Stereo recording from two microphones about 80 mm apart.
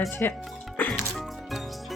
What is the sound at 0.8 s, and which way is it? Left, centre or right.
Music, left.